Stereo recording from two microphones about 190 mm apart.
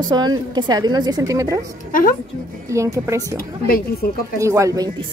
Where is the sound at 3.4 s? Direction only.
50° left (ahead or behind).